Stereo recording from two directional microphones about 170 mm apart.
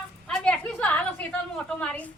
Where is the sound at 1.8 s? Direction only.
10° left (ahead or behind).